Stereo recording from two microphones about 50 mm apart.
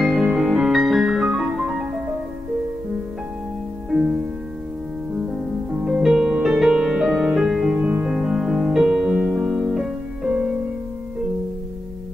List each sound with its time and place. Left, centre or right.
0.0 s music: centre
5.1 s music: centre
6.0 s music: centre